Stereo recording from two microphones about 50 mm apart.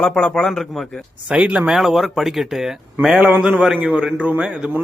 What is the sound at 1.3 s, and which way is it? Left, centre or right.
Speech, right.